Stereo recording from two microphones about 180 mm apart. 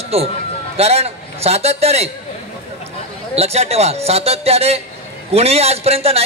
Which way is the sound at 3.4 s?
35° right (ahead or behind).